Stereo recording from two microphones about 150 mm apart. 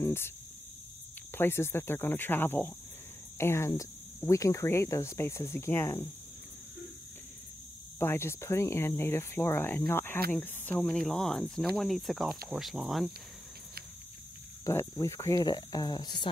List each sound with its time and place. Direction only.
0.0 s speech: 15° left (ahead or behind)
1.3 s speech: 15° left (ahead or behind)
8.0 s speech: 15° left (ahead or behind); by 13.1 s centre (ahead or behind)
14.6 s speech: 20° left (ahead or behind)